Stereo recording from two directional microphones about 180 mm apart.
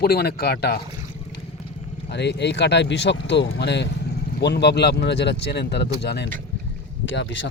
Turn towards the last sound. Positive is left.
turn(degrees=90)